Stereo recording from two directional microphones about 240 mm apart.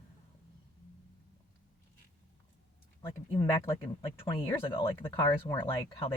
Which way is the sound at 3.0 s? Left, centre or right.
Left.